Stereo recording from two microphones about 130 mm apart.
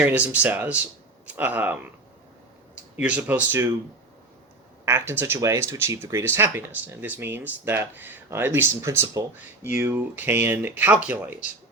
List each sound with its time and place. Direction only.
0.0 s speech: 15° right (ahead or behind)
2.9 s speech: 10° right (ahead or behind)
4.9 s speech: 15° right (ahead or behind)